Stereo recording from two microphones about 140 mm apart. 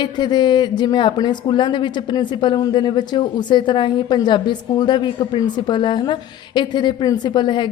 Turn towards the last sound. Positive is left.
turn(degrees=35)  # may be behind; listen again after turning